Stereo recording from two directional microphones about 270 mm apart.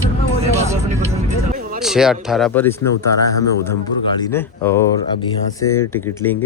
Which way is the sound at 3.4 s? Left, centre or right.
Left.